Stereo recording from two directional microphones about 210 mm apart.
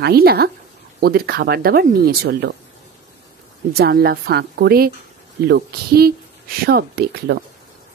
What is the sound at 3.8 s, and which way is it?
Speech, 45° right (ahead or behind).